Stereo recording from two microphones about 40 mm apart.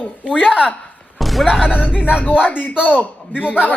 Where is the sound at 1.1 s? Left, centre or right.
Centre.